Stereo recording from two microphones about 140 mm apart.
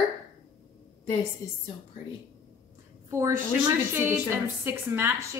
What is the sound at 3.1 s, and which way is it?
A man's voice, 20° right (ahead or behind).